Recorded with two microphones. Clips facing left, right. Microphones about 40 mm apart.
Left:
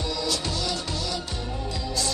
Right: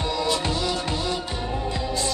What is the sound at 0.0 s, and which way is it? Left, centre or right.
Music, right.